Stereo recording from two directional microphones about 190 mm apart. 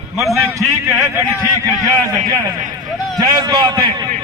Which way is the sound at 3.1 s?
20° right (ahead or behind).